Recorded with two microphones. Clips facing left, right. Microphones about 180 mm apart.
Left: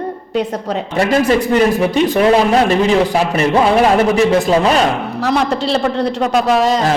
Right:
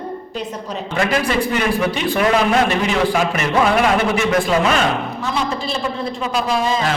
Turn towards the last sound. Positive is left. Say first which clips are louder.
# left 6 dB
turn(degrees=75)  # may be behind; listen again after turning